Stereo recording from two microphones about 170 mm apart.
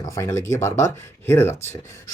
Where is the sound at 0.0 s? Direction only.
15° left (ahead or behind).